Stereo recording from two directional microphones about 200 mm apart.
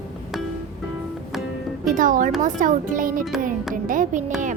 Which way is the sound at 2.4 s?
40° right (ahead or behind).